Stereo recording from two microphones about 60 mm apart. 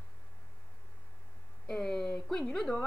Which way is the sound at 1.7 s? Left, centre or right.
Centre.